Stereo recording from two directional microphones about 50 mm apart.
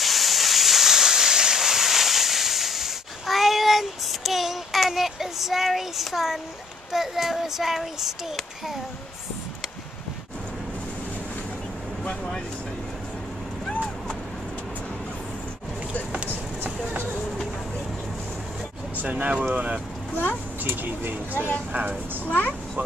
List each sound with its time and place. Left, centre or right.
0.0 s a sound: centre
6.9 s child singing: centre
16.9 s a sound: right
18.9 s speech: right
20.6 s speech: right
22.2 s speech: left